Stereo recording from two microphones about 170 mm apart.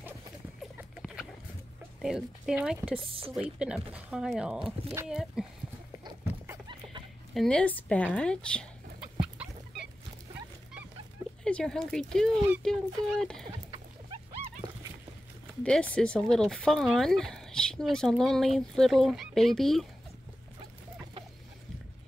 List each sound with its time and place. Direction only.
0.6 s a sound: 5° right (ahead or behind)
2.0 s speech: centre (ahead or behind)
3.0 s a woman's voice: 30° right (ahead or behind)
3.3 s speech: 5° right (ahead or behind)
6.2 s a sound: 15° right (ahead or behind)
7.3 s speech: 5° left (ahead or behind)
11.4 s speech: 5° left (ahead or behind)
15.6 s speech: 5° left (ahead or behind)